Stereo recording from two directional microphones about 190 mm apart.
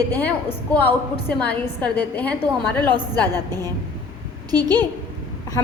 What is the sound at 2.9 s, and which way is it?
A woman's voice, 20° right (ahead or behind).